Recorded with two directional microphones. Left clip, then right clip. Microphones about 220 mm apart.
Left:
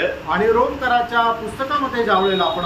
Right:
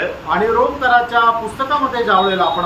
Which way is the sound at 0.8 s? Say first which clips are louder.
Right 5 dB; 15° right (ahead or behind).